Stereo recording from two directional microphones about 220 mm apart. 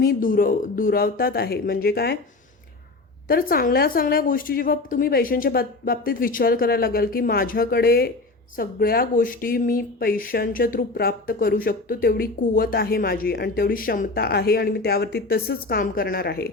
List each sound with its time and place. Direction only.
0.0 s speech: 40° left (ahead or behind)
3.2 s speech: 40° left (ahead or behind)